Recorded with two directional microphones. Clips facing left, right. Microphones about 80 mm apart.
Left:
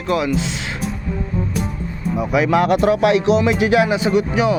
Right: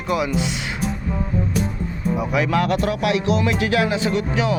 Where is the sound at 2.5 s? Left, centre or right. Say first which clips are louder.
Left 8 dB; centre.